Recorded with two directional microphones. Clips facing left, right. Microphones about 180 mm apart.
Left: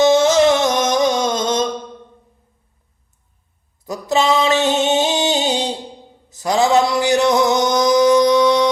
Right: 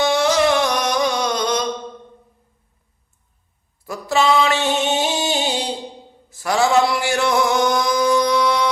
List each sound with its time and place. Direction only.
0.0 s music: 20° left (ahead or behind)
3.8 s music: 20° left (ahead or behind)
6.3 s mantra: 20° left (ahead or behind)